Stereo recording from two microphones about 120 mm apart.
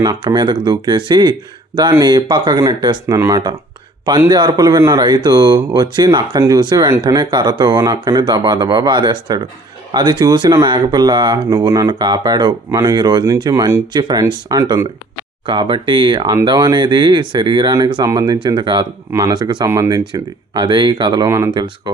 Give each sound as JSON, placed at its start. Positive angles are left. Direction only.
{"t": 0.0, "sound": "speech", "side_deg": -35}
{"t": 13.9, "sound": "speech", "side_deg": -35}
{"t": 15.4, "sound": "speech", "side_deg": -40}
{"t": 19.6, "sound": "speech", "side_deg": -25}
{"t": 21.2, "sound": "speech", "side_deg": -25}
{"t": 21.5, "sound": "speech", "side_deg": -40}